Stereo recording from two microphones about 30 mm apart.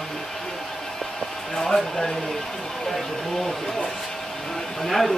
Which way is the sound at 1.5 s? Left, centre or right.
Centre.